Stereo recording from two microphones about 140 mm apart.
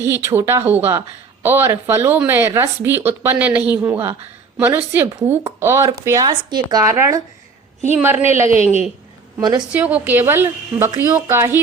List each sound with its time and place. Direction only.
0.0 s speech: 20° right (ahead or behind)
8.4 s a woman's voice: 50° left (ahead or behind)
9.4 s a woman's voice: 30° right (ahead or behind)
9.7 s speech: 10° right (ahead or behind)